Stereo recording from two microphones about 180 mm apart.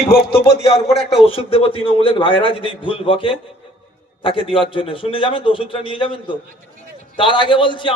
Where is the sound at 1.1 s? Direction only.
30° left (ahead or behind).